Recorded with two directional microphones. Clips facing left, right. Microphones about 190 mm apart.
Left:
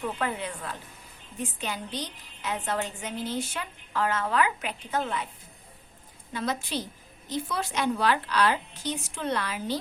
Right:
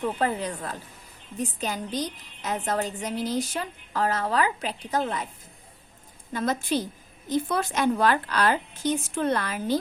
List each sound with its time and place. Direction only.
0.2 s a woman's voice: 40° right (ahead or behind)
6.3 s a woman's voice: 50° right (ahead or behind)